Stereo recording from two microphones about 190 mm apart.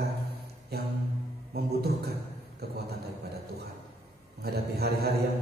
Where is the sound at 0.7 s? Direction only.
55° right (ahead or behind).